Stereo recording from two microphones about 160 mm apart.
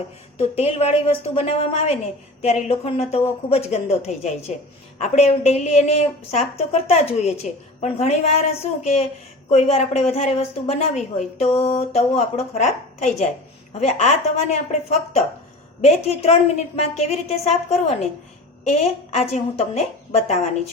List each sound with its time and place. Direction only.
0.3 s a woman's voice: 40° left (ahead or behind)